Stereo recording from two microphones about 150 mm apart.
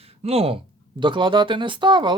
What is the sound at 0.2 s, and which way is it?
Speech, 45° right (ahead or behind).